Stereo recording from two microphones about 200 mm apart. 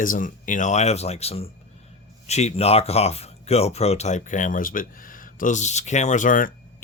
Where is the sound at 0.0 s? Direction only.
40° left (ahead or behind).